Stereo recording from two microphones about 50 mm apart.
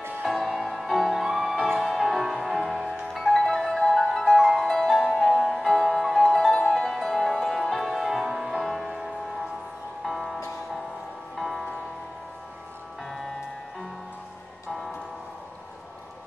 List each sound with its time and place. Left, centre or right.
0.2 s music: centre